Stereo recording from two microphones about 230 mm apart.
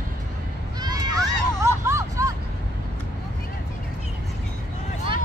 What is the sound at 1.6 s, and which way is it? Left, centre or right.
Hubbub, centre.